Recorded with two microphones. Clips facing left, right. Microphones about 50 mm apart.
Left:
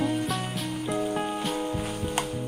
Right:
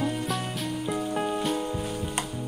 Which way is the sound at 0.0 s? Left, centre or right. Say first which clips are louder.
Left 1 dB; centre.